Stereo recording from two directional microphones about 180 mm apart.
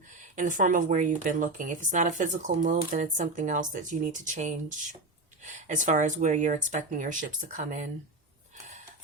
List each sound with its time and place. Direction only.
0.3 s speech: 45° right (ahead or behind)